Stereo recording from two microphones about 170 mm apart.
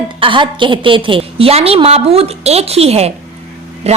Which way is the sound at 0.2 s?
30° right (ahead or behind).